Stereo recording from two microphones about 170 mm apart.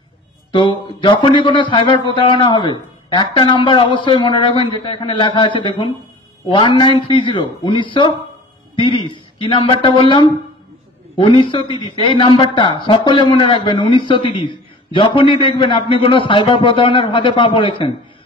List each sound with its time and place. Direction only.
0.5 s a man's voice: 30° left (ahead or behind)